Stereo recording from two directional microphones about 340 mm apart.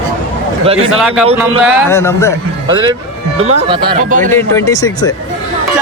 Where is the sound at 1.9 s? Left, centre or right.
Centre.